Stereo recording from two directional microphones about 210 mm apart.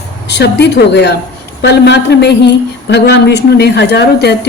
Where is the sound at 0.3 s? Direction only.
55° left (ahead or behind).